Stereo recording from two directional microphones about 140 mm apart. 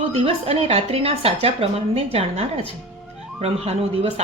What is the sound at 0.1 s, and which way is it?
Speech, 45° right (ahead or behind).